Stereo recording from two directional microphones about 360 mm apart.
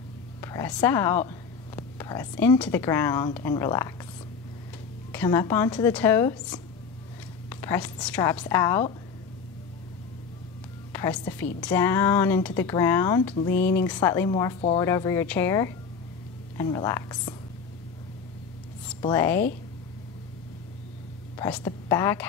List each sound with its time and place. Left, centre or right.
0.4 s a woman's voice: centre
5.1 s speech: centre
10.9 s a woman's voice: centre
18.9 s a woman's voice: centre
21.4 s a woman's voice: centre